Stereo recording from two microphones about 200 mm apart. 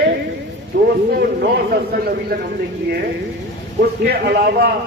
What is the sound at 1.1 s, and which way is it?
Speech, 50° right (ahead or behind).